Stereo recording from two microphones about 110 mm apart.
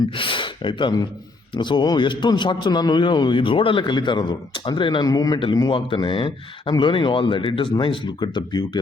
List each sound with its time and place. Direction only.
0.1 s a man's voice: 50° left (ahead or behind)
5.0 s speech: 35° left (ahead or behind)
5.4 s a man's voice: 45° left (ahead or behind)